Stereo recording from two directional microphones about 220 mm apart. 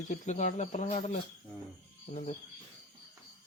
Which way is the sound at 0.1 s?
35° left (ahead or behind).